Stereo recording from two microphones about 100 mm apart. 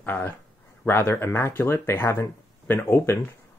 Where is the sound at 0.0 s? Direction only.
20° left (ahead or behind).